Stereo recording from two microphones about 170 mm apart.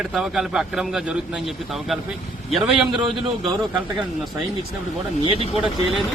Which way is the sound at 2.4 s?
Centre (ahead or behind).